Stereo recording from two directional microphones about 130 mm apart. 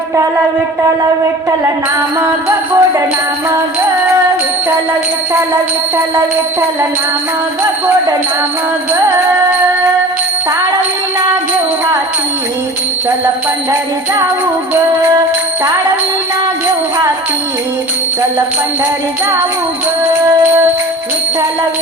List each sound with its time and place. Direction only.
2.1 s music: 25° right (ahead or behind)